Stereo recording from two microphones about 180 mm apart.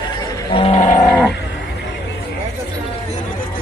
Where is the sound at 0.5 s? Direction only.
35° left (ahead or behind).